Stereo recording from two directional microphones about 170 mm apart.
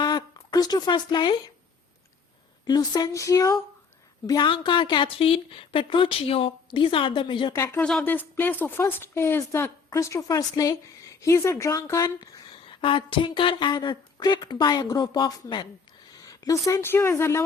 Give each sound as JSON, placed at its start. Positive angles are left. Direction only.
{"t": 0.0, "sound": "a sound", "side_deg": 25}
{"t": 2.6, "sound": "speech", "side_deg": 25}
{"t": 4.3, "sound": "a woman's voice", "side_deg": 30}
{"t": 7.5, "sound": "speech", "side_deg": 15}